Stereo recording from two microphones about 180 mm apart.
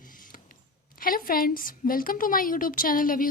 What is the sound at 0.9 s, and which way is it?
A woman's voice, 50° left (ahead or behind).